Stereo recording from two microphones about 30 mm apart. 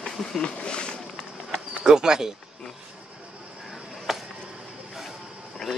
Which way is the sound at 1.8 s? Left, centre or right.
Right.